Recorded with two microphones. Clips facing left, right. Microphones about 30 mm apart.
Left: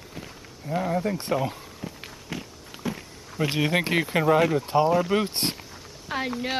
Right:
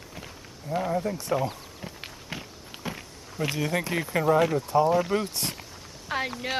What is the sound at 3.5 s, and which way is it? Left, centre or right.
Speech, left.